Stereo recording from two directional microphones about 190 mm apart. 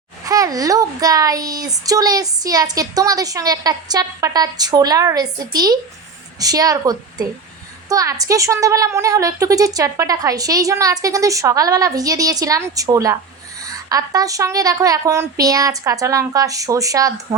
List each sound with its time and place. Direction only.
0.3 s a child's voice: 20° right (ahead or behind)